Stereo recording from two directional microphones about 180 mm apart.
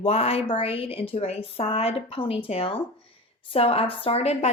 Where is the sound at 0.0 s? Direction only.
35° left (ahead or behind).